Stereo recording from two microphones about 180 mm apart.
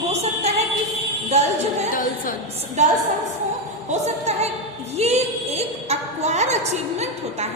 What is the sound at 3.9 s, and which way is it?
A woman's voice, 35° right (ahead or behind).